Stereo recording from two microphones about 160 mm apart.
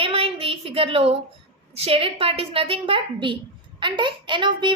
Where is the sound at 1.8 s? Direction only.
35° right (ahead or behind).